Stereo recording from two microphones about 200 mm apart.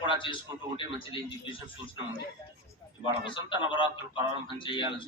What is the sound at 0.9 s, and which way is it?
Speech, 25° left (ahead or behind).